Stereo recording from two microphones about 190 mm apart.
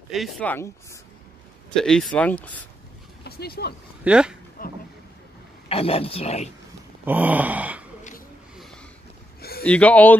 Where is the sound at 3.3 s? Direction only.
55° left (ahead or behind).